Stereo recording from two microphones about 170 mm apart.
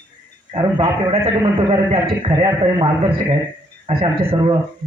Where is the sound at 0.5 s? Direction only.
30° right (ahead or behind).